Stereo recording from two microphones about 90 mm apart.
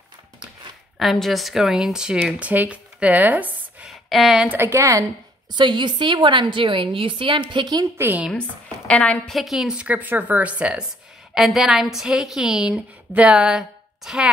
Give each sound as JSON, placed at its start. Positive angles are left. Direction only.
{"t": 0.9, "sound": "speech", "side_deg": 0}
{"t": 4.1, "sound": "speech", "side_deg": -5}
{"t": 4.5, "sound": "speech", "side_deg": -30}
{"t": 5.5, "sound": "a woman's voice", "side_deg": -60}
{"t": 8.0, "sound": "a woman's voice", "side_deg": -20}
{"t": 8.3, "sound": "speech", "side_deg": 10}
{"t": 9.4, "sound": "a woman's voice", "side_deg": -5}